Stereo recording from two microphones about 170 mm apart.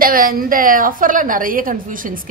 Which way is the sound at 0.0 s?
55° right (ahead or behind).